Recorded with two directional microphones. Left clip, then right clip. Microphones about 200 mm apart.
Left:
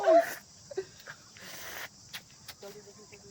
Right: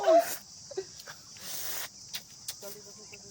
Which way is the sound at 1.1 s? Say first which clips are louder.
Right 2 dB; 15° right (ahead or behind).